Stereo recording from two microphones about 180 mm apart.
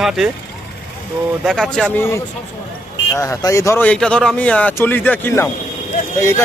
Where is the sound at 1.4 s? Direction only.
5° left (ahead or behind).